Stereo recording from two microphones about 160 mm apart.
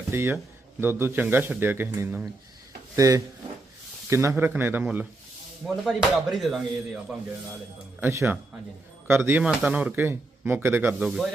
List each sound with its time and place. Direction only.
0.1 s speech: 15° right (ahead or behind)
8.0 s speech: 15° right (ahead or behind)